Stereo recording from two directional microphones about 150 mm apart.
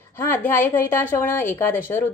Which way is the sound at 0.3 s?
15° left (ahead or behind).